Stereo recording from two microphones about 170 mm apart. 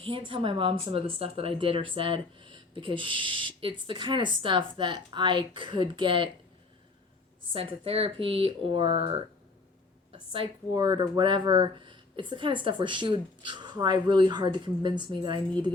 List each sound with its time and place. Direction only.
0.0 s speech: 30° right (ahead or behind)
7.5 s speech: 35° right (ahead or behind)